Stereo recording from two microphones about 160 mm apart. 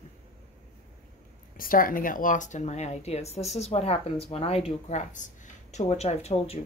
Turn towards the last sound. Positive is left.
turn(degrees=40)  # may be behind; listen again after turning